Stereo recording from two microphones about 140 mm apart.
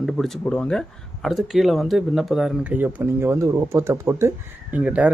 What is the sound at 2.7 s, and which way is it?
A man's voice, 15° right (ahead or behind).